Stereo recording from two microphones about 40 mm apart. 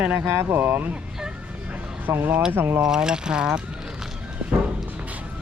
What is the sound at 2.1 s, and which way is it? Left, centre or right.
Speech, right.